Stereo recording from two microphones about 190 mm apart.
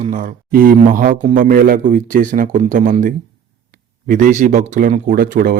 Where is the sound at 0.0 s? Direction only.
45° right (ahead or behind).